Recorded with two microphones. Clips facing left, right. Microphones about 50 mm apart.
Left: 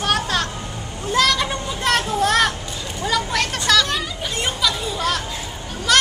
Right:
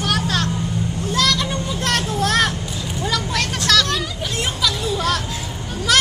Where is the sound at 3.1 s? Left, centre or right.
Centre.